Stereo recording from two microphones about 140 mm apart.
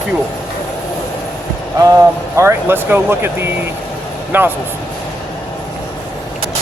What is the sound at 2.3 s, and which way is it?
Speech, 20° right (ahead or behind).